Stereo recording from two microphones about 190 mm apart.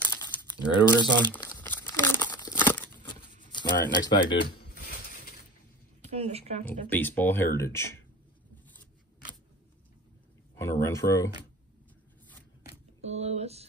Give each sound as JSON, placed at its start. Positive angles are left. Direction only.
{"t": 0.0, "sound": "crumpling", "side_deg": 10}
{"t": 1.2, "sound": "speech", "side_deg": 10}
{"t": 1.6, "sound": "crumpling", "side_deg": 10}
{"t": 2.2, "sound": "crumpling", "side_deg": 20}
{"t": 2.6, "sound": "crumpling", "side_deg": 10}
{"t": 3.5, "sound": "speech", "side_deg": 20}
{"t": 4.4, "sound": "a sound", "side_deg": 60}
{"t": 6.0, "sound": "speech", "side_deg": -35}
{"t": 6.6, "sound": "speech", "side_deg": 10}
{"t": 10.6, "sound": "speech", "side_deg": 15}
{"t": 13.0, "sound": "speech", "side_deg": -35}